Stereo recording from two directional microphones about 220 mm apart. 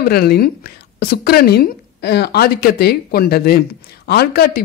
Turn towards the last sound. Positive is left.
turn(degrees=45)  # may be behind; listen again after turning